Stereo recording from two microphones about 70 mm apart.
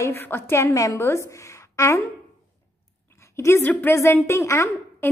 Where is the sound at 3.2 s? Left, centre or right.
Left.